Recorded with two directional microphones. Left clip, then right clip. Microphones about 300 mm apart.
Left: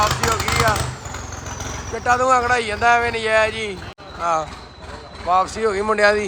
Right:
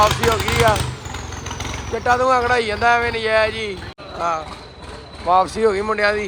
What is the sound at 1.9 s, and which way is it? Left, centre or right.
A man's voice, centre.